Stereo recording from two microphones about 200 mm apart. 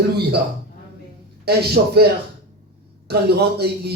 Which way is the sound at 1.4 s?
55° right (ahead or behind).